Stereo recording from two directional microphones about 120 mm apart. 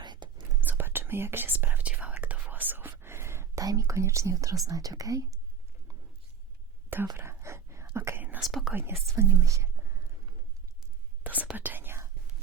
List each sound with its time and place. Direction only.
0.0 s whispering: 35° right (ahead or behind)
0.6 s whispering: 15° right (ahead or behind)
3.0 s speech: 20° right (ahead or behind)
7.2 s whispering: 20° right (ahead or behind)
8.4 s speech: centre (ahead or behind)
8.7 s speech: 20° right (ahead or behind)
11.2 s whispering: 15° right (ahead or behind)